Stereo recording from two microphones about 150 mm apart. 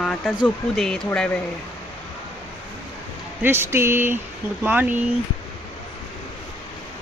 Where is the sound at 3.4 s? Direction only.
15° right (ahead or behind).